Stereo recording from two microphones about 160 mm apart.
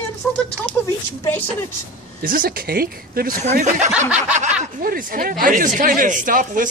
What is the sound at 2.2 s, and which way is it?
Speech, 65° right (ahead or behind).